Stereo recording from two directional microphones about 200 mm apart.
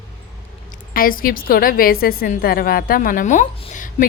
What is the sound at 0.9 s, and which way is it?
A woman's voice, 45° left (ahead or behind).